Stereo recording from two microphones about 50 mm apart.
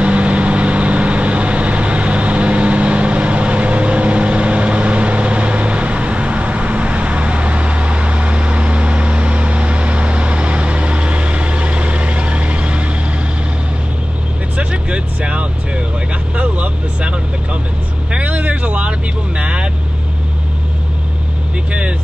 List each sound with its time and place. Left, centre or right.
0.0 s vehicle: right
14.6 s vehicle: right